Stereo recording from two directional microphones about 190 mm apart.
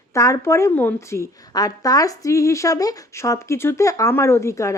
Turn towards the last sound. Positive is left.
turn(degrees=15)  # may be behind; listen again after turning